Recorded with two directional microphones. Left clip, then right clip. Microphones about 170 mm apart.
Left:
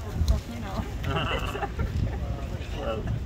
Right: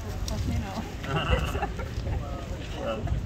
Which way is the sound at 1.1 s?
50° right (ahead or behind).